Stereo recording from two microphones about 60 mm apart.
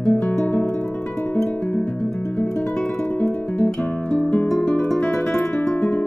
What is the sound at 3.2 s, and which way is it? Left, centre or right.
Guitar, left.